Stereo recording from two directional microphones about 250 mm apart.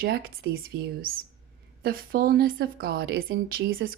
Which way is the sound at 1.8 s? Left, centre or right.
Right.